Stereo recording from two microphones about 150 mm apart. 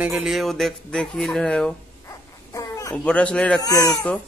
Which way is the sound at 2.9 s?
5° left (ahead or behind).